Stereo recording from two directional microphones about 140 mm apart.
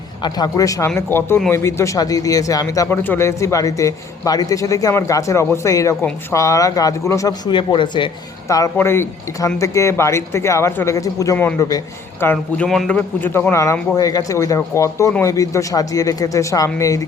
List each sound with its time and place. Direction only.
0.2 s a man's voice: 30° left (ahead or behind)
8.4 s a man's voice: 25° left (ahead or behind)
12.6 s a man's voice: centre (ahead or behind)
13.0 s a man's voice: 15° left (ahead or behind)